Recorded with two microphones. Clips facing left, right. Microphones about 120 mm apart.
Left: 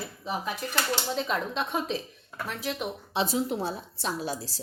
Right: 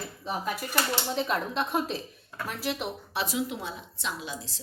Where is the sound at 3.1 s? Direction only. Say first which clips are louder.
Left 6 dB; 25° left (ahead or behind).